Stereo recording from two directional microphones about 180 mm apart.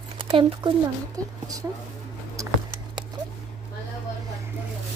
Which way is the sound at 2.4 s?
20° right (ahead or behind).